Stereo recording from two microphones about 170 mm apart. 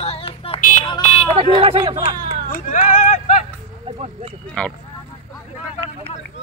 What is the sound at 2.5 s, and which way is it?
Speech, 50° left (ahead or behind).